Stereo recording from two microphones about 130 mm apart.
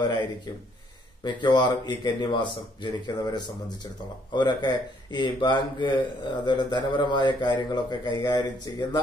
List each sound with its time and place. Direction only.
0.0 s speech: 35° left (ahead or behind)